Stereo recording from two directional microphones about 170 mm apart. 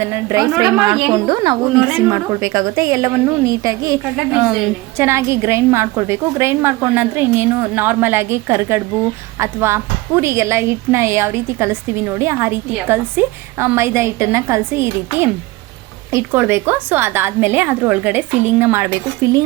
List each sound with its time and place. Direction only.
0.0 s a woman's voice: 15° right (ahead or behind)
4.3 s a woman's voice: 5° right (ahead or behind)
4.9 s a woman's voice: 15° right (ahead or behind)
16.1 s a woman's voice: 15° right (ahead or behind)